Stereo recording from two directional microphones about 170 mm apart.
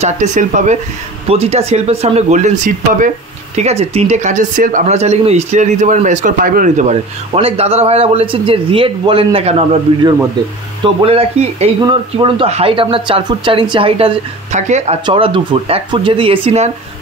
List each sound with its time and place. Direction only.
0.0 s speech: 45° right (ahead or behind)
11.1 s speech: 35° right (ahead or behind)